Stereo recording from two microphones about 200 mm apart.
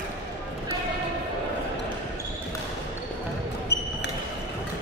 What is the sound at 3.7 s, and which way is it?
Basketball bounce, 55° left (ahead or behind).